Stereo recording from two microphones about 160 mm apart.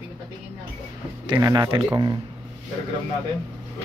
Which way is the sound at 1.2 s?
25° right (ahead or behind).